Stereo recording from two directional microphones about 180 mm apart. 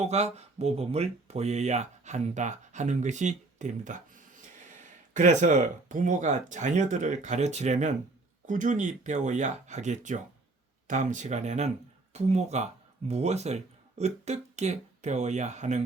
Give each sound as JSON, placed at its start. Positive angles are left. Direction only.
{"t": 0.0, "sound": "speech", "side_deg": -40}